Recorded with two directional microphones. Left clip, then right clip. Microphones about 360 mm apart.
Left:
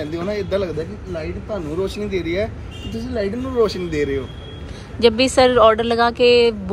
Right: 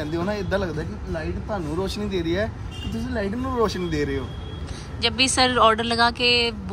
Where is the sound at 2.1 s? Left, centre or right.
Centre.